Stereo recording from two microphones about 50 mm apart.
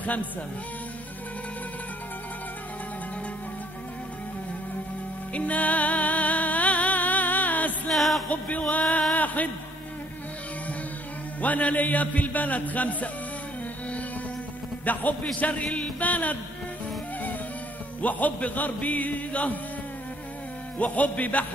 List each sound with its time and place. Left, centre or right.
0.0 s speech: left
5.3 s music: left
7.9 s music: centre
8.5 s a man's voice: left
9.1 s a sound: left
11.4 s a man's voice: left
14.9 s a man's voice: left
18.0 s a man's voice: left
20.7 s a man's voice: left